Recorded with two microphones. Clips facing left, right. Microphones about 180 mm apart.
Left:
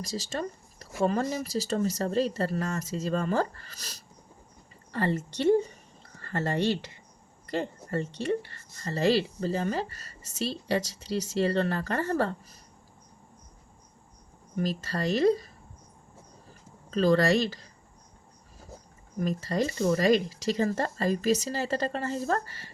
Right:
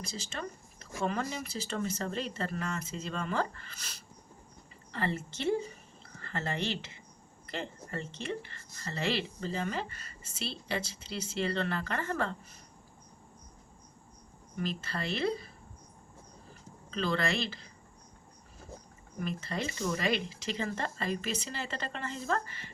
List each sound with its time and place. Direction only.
0.0 s speech: 40° left (ahead or behind)
14.6 s speech: 40° left (ahead or behind)
16.9 s speech: 40° left (ahead or behind)
19.2 s speech: 40° left (ahead or behind)